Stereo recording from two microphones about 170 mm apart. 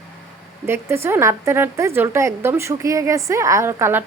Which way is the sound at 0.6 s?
15° right (ahead or behind).